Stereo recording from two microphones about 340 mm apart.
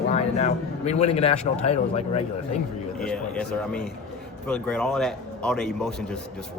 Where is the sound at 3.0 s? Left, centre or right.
Centre.